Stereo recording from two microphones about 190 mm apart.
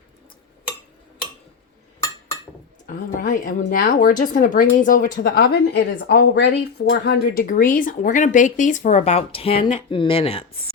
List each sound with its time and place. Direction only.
2.8 s speech: 45° left (ahead or behind); by 10.4 s 30° left (ahead or behind)